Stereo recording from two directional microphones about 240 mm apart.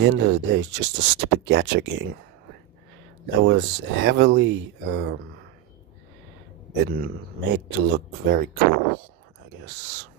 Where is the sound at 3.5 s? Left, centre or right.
Right.